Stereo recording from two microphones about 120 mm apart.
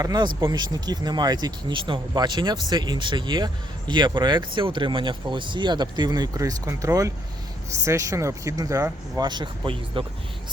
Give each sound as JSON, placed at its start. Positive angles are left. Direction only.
{"t": 0.0, "sound": "speech", "side_deg": -35}